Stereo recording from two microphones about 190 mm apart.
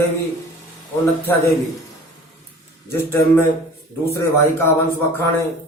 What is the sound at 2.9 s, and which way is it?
A man's voice, 15° left (ahead or behind).